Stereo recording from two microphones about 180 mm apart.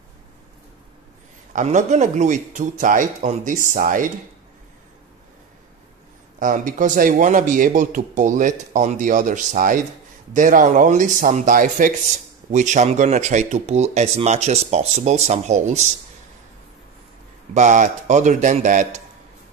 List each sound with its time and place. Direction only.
1.5 s speech: 45° right (ahead or behind)
6.4 s speech: 45° right (ahead or behind)
17.6 s speech: 45° right (ahead or behind)